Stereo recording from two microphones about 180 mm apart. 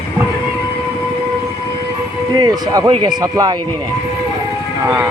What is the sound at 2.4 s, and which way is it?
Speech, 20° right (ahead or behind).